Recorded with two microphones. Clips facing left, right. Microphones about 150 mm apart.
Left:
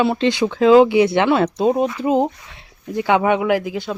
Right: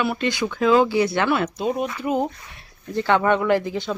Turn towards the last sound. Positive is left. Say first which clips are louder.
# left 1 dB
turn(degrees=5)  # may be behind; listen again after turning